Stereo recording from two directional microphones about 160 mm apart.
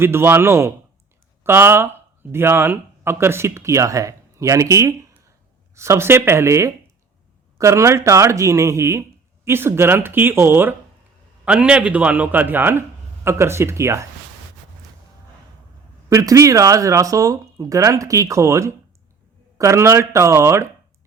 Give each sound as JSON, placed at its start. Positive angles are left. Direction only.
{"t": 0.0, "sound": "speech", "side_deg": -15}
{"t": 16.0, "sound": "speech", "side_deg": -20}